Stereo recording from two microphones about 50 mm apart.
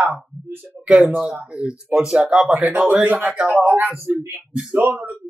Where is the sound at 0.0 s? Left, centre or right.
Right.